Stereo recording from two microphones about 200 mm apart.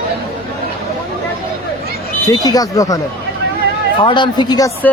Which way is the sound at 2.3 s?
20° left (ahead or behind).